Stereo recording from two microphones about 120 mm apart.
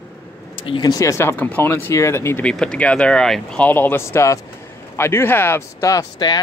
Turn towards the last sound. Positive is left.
turn(degrees=30)  # may be behind; listen again after turning